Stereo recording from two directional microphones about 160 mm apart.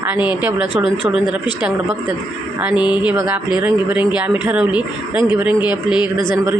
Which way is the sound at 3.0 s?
10° right (ahead or behind).